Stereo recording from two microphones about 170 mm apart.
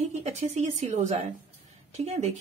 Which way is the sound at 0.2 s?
40° right (ahead or behind).